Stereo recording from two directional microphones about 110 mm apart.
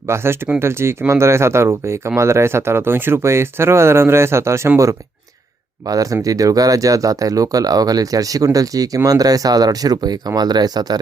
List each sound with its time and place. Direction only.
0.1 s speech: 25° right (ahead or behind)
5.8 s speech: 35° right (ahead or behind)